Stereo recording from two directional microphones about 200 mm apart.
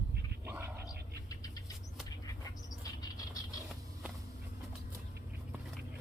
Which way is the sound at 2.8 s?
20° left (ahead or behind).